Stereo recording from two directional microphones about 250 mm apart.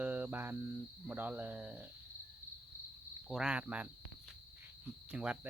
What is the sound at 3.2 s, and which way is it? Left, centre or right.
Speech, centre.